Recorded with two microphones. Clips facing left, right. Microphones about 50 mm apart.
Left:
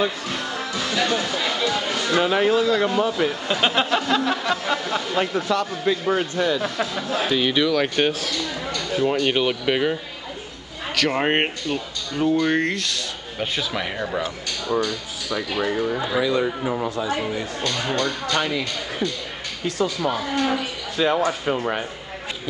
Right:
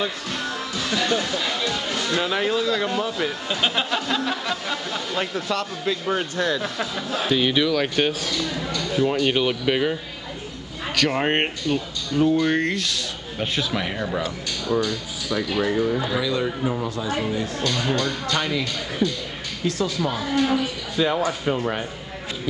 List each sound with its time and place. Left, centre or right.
0.0 s speech: centre
11.0 s speech: centre
16.2 s speech: left
16.4 s speech: centre
16.9 s speech: left
17.6 s speech: centre
18.2 s speech: centre
20.0 s speech: centre